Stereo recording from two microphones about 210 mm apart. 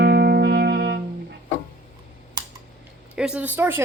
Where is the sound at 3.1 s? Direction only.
5° right (ahead or behind).